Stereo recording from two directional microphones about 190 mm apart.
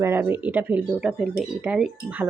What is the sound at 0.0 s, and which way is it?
Speech, 10° right (ahead or behind).